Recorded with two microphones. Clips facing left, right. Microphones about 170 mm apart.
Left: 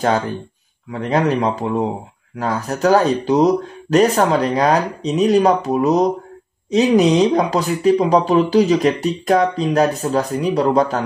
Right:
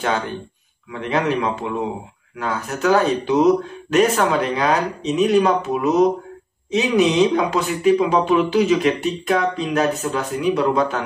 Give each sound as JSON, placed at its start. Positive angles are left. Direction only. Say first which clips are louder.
{"t": 0.9, "sound": "speech", "louder": "left 3 dB", "side_deg": 40}